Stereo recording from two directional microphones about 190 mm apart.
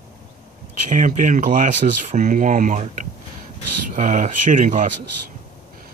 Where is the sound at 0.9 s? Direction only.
45° right (ahead or behind).